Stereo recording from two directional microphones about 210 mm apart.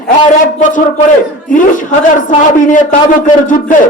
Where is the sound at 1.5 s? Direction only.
40° left (ahead or behind).